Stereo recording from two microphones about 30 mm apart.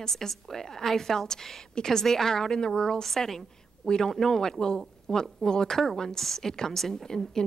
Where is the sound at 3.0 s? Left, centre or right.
Centre.